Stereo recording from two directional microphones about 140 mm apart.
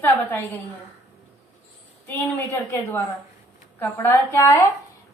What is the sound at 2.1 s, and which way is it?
A woman's voice, 15° left (ahead or behind).